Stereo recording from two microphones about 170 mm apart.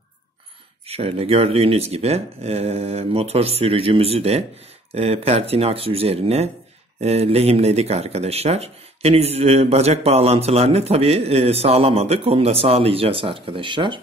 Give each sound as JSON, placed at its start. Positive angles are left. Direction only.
{"t": 0.8, "sound": "speech", "side_deg": -35}